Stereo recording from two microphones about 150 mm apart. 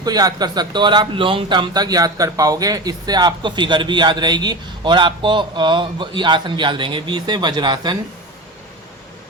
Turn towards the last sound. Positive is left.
turn(degrees=-30)  # may be behind; listen again after turning